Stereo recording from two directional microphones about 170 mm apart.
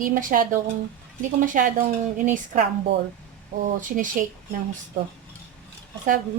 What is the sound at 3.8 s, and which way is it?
Speech, 50° right (ahead or behind).